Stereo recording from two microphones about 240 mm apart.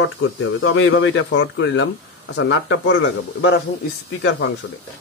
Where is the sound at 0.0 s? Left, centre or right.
Left.